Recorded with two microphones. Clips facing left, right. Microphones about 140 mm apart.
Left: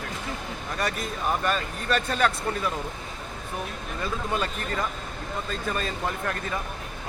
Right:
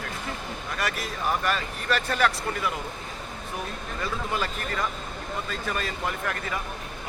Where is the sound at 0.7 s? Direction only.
25° left (ahead or behind).